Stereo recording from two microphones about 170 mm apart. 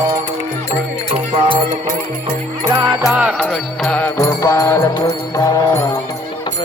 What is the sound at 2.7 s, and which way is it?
Music, 20° right (ahead or behind).